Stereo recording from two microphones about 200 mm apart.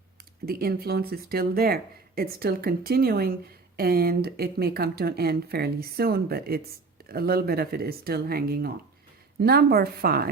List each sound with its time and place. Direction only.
0.4 s speech: 50° right (ahead or behind)